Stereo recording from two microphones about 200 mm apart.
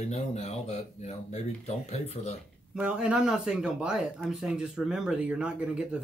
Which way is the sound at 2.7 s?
5° right (ahead or behind).